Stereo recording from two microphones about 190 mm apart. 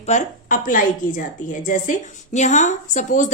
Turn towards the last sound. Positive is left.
turn(degrees=40)  # may be behind; listen again after turning